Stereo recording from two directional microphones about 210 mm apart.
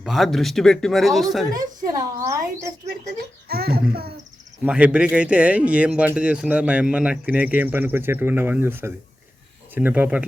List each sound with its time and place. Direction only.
0.0 s speech: centre (ahead or behind)
1.5 s speech: 15° right (ahead or behind)
2.8 s speech: 45° right (ahead or behind)
4.6 s speech: 5° right (ahead or behind)